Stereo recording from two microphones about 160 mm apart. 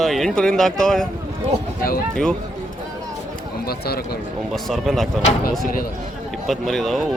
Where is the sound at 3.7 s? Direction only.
75° left (ahead or behind).